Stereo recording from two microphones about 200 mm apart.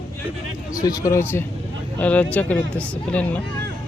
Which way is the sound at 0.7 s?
15° left (ahead or behind).